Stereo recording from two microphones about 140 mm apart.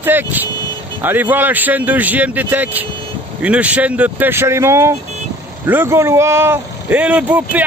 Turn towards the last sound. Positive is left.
turn(degrees=-10)  # may be behind; listen again after turning